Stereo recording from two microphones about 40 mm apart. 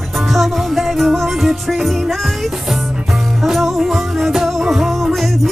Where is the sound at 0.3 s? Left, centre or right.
Centre.